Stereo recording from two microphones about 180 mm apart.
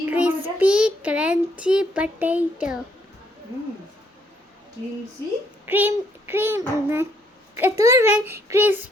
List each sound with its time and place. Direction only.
0.1 s a sound: 10° right (ahead or behind)
0.6 s a child's voice: 5° right (ahead or behind)
5.6 s a child's voice: 10° right (ahead or behind)